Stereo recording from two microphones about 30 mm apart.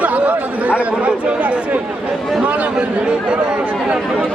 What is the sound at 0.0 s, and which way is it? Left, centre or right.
Chatter, right.